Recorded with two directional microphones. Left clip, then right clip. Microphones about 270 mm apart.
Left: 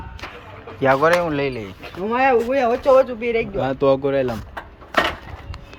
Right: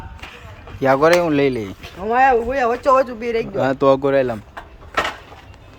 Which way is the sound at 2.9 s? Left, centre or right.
Right.